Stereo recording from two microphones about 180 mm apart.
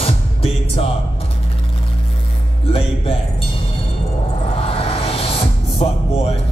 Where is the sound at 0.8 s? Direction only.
30° left (ahead or behind).